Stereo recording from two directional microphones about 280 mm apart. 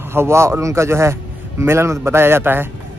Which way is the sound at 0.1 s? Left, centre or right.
Centre.